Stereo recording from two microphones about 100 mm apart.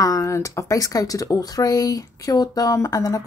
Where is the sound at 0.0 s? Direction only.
35° left (ahead or behind).